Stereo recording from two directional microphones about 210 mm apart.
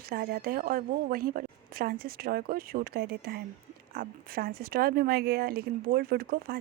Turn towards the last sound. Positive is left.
turn(degrees=-45)  # may be behind; listen again after turning